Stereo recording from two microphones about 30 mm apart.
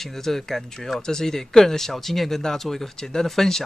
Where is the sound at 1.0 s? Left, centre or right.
Centre.